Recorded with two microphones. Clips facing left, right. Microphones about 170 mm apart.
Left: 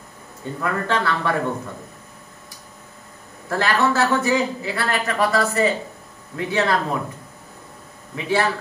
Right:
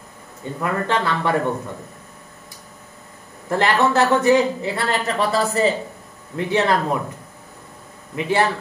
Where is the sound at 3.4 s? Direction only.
20° right (ahead or behind).